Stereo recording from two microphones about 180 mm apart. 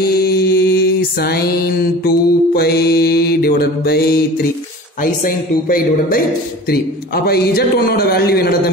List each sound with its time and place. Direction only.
0.0 s mantra: 60° left (ahead or behind)
5.0 s speech: 50° left (ahead or behind)
7.2 s a man's voice: 60° left (ahead or behind)